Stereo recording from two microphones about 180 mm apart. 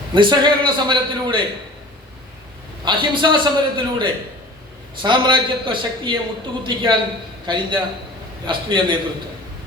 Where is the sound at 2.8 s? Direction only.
25° right (ahead or behind).